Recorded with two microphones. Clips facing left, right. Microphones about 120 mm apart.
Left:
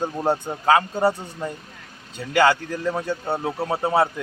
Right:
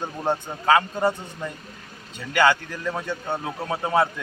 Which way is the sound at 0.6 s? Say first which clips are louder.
Left 1 dB; 30° left (ahead or behind).